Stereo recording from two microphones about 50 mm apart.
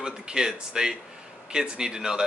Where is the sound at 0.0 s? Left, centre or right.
Centre.